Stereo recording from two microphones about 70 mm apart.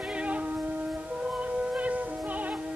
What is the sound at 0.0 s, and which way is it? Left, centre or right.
Music, centre.